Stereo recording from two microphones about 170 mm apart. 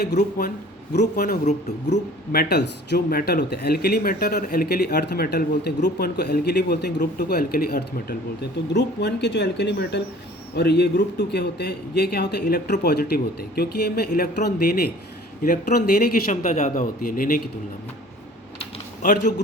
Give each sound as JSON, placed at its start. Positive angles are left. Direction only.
{"t": 0.0, "sound": "speech", "side_deg": 65}
{"t": 1.5, "sound": "speech", "side_deg": 40}
{"t": 2.3, "sound": "speech", "side_deg": 65}
{"t": 16.3, "sound": "speech", "side_deg": 45}
{"t": 19.0, "sound": "speech", "side_deg": 50}